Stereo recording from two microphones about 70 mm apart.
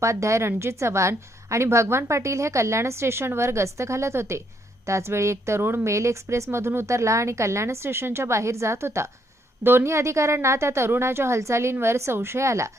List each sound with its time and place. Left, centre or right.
0.0 s a woman's voice: right